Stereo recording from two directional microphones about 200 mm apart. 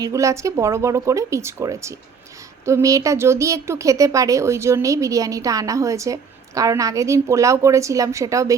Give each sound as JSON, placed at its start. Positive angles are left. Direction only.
{"t": 0.0, "sound": "speech", "side_deg": -15}